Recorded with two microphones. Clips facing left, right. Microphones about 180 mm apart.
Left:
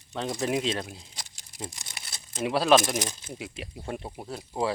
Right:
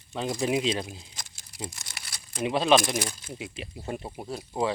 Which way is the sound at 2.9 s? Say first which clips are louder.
Even; 20° left (ahead or behind).